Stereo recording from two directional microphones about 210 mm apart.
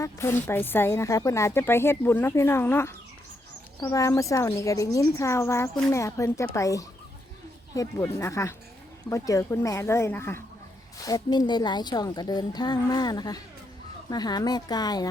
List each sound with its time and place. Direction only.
0.0 s a woman's voice: 10° left (ahead or behind)